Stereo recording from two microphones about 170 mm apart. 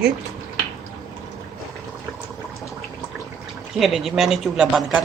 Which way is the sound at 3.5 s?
Centre (ahead or behind).